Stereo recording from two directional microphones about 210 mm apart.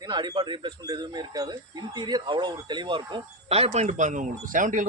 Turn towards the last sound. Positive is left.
turn(degrees=-40)  # may be behind; listen again after turning